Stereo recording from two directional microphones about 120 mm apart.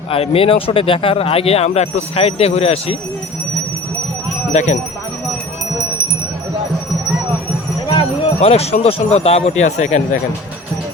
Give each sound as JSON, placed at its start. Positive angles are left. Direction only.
{"t": 0.1, "sound": "speech", "side_deg": 50}
{"t": 4.5, "sound": "speech", "side_deg": 75}
{"t": 8.4, "sound": "speech", "side_deg": 60}